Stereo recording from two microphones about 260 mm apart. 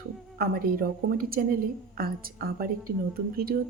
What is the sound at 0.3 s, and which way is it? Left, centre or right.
Speech, right.